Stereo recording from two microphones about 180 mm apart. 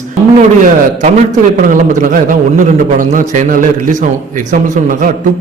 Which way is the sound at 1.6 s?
45° right (ahead or behind).